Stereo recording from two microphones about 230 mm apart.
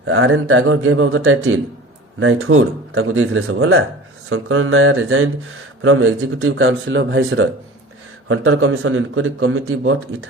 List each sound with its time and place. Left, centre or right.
0.1 s a man's voice: right
8.3 s a man's voice: right